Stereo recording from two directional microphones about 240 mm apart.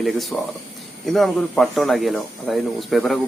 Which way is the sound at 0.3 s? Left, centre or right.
Centre.